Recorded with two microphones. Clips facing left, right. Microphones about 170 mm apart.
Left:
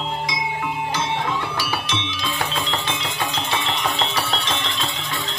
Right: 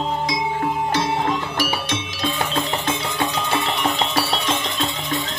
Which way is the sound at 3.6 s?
45° right (ahead or behind).